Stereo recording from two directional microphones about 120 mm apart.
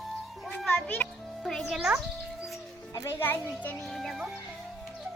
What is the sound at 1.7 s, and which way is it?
Music, centre (ahead or behind).